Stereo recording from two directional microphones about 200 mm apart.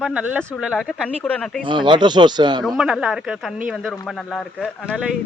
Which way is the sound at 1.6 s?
25° right (ahead or behind).